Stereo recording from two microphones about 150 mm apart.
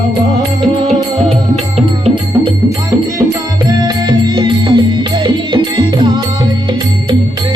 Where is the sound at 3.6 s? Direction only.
25° right (ahead or behind).